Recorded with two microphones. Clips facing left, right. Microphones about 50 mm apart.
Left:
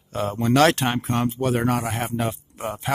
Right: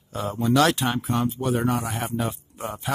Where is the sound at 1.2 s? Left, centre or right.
Left.